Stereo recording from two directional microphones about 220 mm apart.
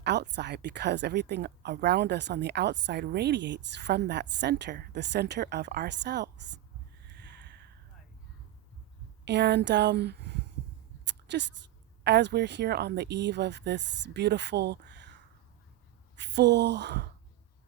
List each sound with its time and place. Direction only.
0.0 s a woman's voice: 50° right (ahead or behind)
7.1 s a sound: 50° right (ahead or behind)
9.2 s speech: 50° right (ahead or behind)
11.0 s a sound: 50° right (ahead or behind)
12.0 s a woman's voice: 50° right (ahead or behind)
16.1 s a woman's voice: 50° right (ahead or behind)